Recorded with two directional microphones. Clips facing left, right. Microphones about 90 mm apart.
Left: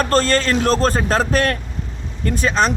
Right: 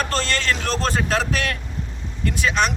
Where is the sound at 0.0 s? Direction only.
40° left (ahead or behind).